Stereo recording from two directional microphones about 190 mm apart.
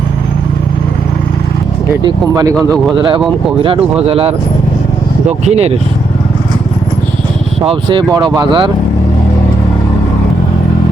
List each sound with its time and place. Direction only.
2.0 s speech: 20° right (ahead or behind)
5.5 s speech: 35° right (ahead or behind)
7.6 s speech: 25° right (ahead or behind)